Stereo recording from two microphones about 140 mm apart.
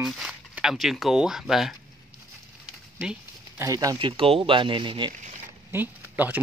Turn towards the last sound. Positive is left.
turn(degrees=-15)  # may be behind; listen again after turning